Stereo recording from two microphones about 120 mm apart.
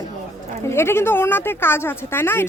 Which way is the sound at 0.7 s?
20° left (ahead or behind).